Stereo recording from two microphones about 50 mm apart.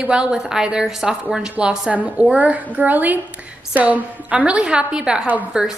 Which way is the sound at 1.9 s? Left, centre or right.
Right.